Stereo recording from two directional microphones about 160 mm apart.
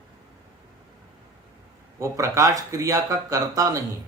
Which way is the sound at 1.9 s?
20° right (ahead or behind).